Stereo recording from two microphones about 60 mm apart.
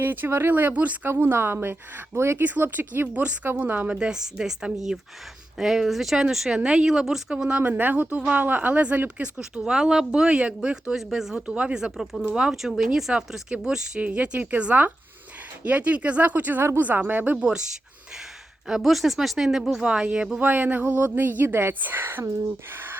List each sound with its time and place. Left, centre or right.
0.0 s a woman's voice: right
0.5 s speech: right
1.0 s a woman's voice: right
2.4 s a woman's voice: right
3.9 s speech: centre
7.6 s speech: right
10.9 s speech: centre
11.3 s speech: centre
14.0 s a woman's voice: right
17.3 s speech: centre
18.7 s speech: centre
20.4 s a woman's voice: right